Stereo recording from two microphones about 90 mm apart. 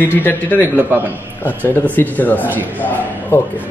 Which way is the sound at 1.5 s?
20° left (ahead or behind).